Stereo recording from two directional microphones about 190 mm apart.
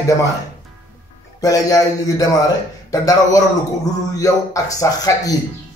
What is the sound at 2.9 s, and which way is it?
Speech, 20° left (ahead or behind).